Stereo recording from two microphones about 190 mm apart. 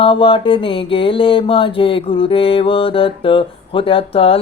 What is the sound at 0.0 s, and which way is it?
Mantra, 30° left (ahead or behind).